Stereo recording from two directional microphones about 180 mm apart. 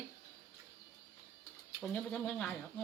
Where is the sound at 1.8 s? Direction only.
Centre (ahead or behind).